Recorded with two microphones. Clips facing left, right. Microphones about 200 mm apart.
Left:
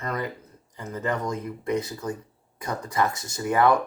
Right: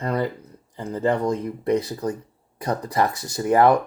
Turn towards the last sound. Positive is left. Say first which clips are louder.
# right 4 dB
turn(degrees=-35)  # may be behind; listen again after turning